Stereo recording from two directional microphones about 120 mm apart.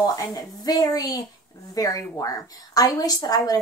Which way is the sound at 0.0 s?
30° left (ahead or behind).